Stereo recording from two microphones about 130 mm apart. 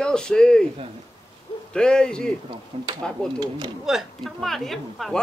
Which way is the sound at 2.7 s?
55° right (ahead or behind).